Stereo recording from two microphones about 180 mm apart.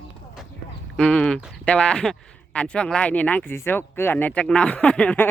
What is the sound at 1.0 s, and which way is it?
Speech, 5° left (ahead or behind).